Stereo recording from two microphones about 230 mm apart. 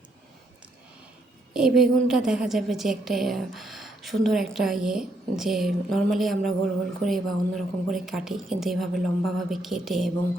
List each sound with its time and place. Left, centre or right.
1.5 s a woman's voice: centre